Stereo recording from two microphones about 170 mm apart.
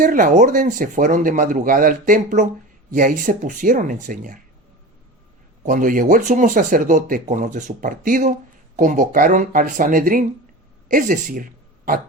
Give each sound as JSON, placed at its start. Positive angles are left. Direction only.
{"t": 0.0, "sound": "speech", "side_deg": -55}
{"t": 5.6, "sound": "speech", "side_deg": -50}